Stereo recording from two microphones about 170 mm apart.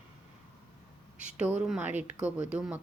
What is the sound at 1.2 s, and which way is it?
A woman's voice, 10° right (ahead or behind).